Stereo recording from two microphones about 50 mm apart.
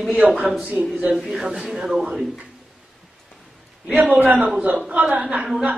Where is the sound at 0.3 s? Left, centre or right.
Centre.